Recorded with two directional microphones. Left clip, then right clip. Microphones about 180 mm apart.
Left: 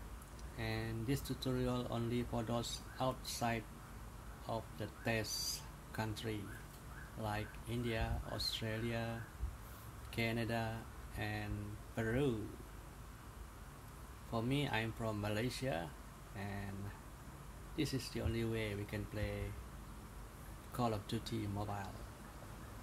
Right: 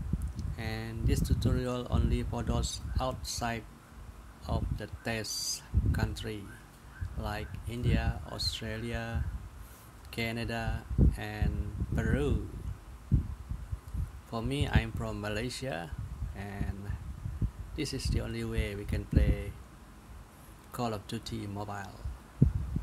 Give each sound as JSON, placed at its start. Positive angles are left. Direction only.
{"t": 0.4, "sound": "speech", "side_deg": -30}
{"t": 14.3, "sound": "speech", "side_deg": -30}
{"t": 17.7, "sound": "speech", "side_deg": -30}
{"t": 20.7, "sound": "speech", "side_deg": -30}